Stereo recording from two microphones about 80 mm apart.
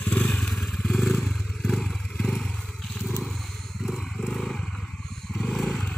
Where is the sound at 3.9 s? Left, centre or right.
Centre.